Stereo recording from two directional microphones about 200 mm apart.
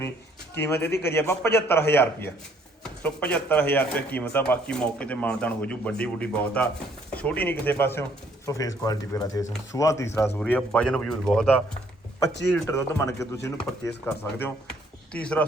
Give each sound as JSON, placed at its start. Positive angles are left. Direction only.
{"t": 0.6, "sound": "speech", "side_deg": 10}
{"t": 0.9, "sound": "a man's voice", "side_deg": 55}
{"t": 1.1, "sound": "speech", "side_deg": 10}
{"t": 12.6, "sound": "speech", "side_deg": 15}